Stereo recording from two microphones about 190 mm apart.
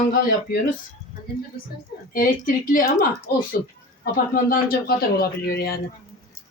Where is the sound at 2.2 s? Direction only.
45° left (ahead or behind).